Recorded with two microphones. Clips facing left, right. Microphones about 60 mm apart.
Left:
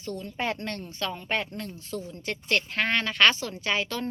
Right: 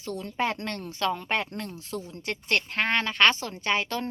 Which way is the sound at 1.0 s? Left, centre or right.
Right.